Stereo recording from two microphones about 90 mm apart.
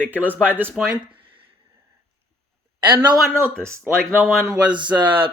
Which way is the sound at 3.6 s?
30° right (ahead or behind).